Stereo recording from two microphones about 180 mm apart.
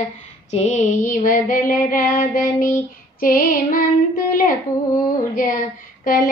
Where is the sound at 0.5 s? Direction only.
40° left (ahead or behind).